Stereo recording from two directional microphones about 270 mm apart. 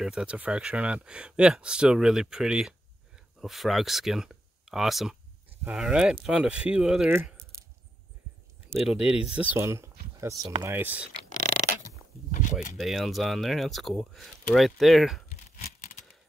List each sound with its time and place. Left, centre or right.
0.0 s speech: centre
8.7 s speech: centre
12.3 s speech: left
12.7 s speech: centre
15.2 s tearing: left